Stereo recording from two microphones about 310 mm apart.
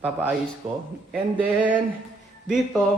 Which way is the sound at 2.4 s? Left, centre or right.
Centre.